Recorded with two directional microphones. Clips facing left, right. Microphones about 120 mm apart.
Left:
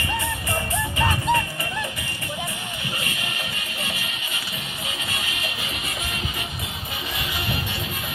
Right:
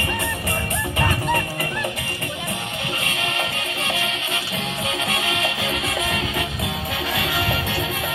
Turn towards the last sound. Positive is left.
turn(degrees=-90)